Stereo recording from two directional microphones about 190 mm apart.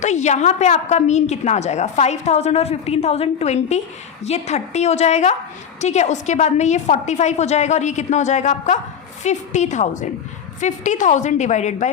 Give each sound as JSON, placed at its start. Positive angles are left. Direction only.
{"t": 0.0, "sound": "a woman's voice", "side_deg": 40}